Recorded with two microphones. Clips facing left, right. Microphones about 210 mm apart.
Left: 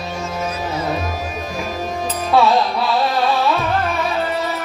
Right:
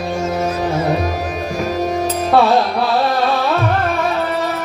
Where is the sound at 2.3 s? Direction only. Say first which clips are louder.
Right 1 dB; 55° right (ahead or behind).